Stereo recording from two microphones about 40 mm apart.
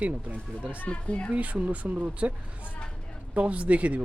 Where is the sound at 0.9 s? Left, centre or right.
Left.